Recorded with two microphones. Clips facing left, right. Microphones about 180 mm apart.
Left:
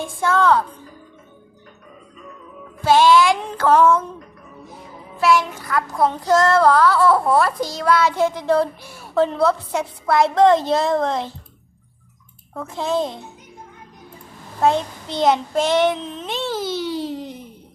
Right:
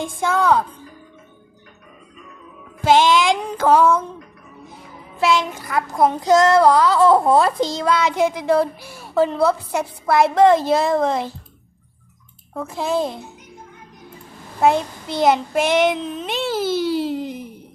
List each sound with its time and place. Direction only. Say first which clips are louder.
0.0 s child singing: left 1 dB; 15° right (ahead or behind)
2.8 s child singing: left 1 dB; 20° right (ahead or behind)
5.2 s child singing: left 1 dB; 20° right (ahead or behind)
12.5 s child singing: right 1 dB; 5° right (ahead or behind)
14.6 s child singing: right 1 dB; 10° right (ahead or behind)
16.7 s a sound: right 4 dB; 10° right (ahead or behind)